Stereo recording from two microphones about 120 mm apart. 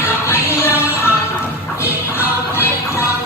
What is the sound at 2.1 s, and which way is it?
Music, 20° left (ahead or behind).